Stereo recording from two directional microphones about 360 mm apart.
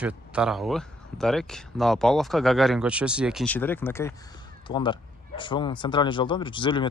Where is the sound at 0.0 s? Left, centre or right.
Centre.